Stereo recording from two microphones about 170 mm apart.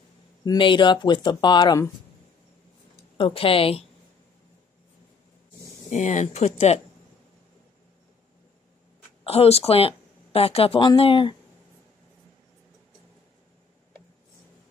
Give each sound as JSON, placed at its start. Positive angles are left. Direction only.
{"t": 0.5, "sound": "speech", "side_deg": 30}
{"t": 3.2, "sound": "speech", "side_deg": 30}
{"t": 5.9, "sound": "speech", "side_deg": 45}
{"t": 9.2, "sound": "a woman's voice", "side_deg": 35}